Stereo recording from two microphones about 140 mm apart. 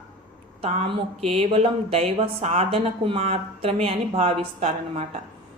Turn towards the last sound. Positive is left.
turn(degrees=-45)  # may be behind; listen again after turning